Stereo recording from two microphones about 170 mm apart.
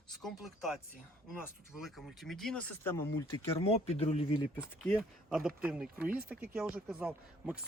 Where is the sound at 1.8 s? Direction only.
Centre (ahead or behind).